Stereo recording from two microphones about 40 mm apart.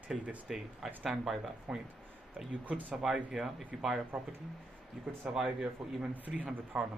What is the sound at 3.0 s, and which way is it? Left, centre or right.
Speech, centre.